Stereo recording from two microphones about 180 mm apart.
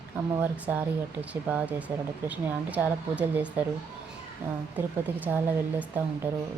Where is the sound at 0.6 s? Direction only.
10° right (ahead or behind).